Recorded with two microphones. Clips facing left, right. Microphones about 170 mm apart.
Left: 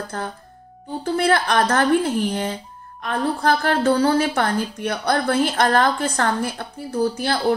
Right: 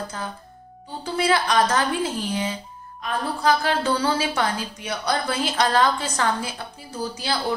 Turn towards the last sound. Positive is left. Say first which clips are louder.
# left 6 dB
turn(degrees=55)  # may be behind; listen again after turning